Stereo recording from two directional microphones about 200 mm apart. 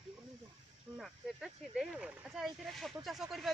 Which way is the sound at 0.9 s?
Centre (ahead or behind).